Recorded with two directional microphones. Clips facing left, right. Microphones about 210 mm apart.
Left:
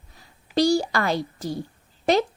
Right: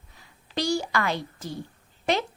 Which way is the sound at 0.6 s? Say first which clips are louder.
Left 6 dB; 35° left (ahead or behind).